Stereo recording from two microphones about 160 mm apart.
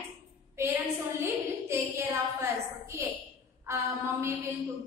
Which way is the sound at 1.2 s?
15° right (ahead or behind).